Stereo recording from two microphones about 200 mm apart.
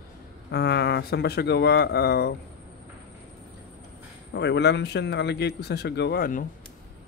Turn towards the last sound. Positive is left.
turn(degrees=45)  # may be behind; listen again after turning